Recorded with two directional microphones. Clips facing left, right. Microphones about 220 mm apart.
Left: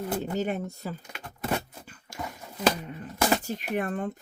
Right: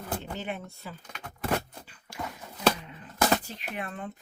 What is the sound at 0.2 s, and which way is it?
Speech, 40° left (ahead or behind).